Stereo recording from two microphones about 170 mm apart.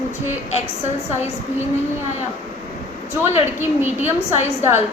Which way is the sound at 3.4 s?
15° right (ahead or behind).